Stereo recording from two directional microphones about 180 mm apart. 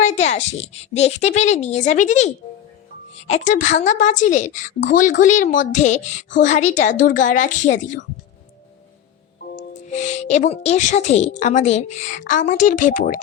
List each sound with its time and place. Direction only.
0.0 s a woman's voice: 40° left (ahead or behind)
9.9 s a woman's voice: 40° left (ahead or behind)